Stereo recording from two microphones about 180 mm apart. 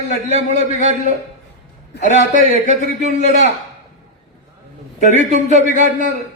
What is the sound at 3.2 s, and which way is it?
Speech, 40° left (ahead or behind).